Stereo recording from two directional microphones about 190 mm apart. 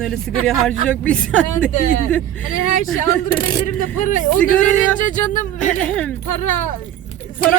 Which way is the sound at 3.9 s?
45° left (ahead or behind).